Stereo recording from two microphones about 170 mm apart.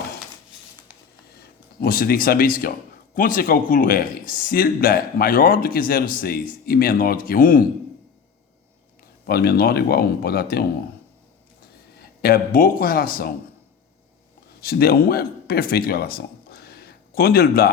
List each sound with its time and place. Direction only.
1.8 s speech: 60° left (ahead or behind)
9.2 s speech: 65° left (ahead or behind)
11.9 s a man's voice: 60° left (ahead or behind)
14.6 s speech: 65° left (ahead or behind)